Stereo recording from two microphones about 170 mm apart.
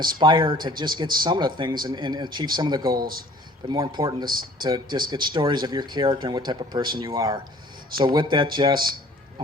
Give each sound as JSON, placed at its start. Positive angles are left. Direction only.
{"t": 0.2, "sound": "speech", "side_deg": -25}
{"t": 3.0, "sound": "a man's voice", "side_deg": -60}
{"t": 3.7, "sound": "speech", "side_deg": -25}